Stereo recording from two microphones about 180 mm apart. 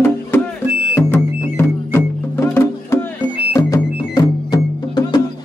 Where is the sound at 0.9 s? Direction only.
15° left (ahead or behind).